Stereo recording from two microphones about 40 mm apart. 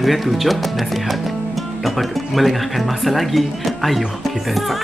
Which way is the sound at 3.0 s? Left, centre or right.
Centre.